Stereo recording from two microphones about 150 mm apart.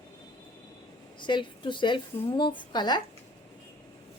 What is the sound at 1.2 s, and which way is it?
A woman's voice, 30° left (ahead or behind).